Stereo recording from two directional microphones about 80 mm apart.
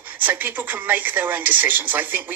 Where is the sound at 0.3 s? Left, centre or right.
Right.